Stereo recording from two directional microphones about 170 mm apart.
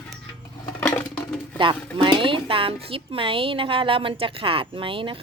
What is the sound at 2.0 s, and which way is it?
A woman's voice, 30° right (ahead or behind).